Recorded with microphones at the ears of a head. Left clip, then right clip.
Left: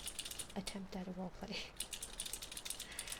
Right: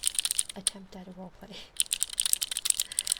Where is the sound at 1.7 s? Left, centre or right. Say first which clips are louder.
Right 16 dB; right.